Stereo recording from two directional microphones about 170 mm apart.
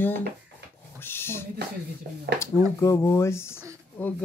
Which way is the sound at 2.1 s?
65° right (ahead or behind).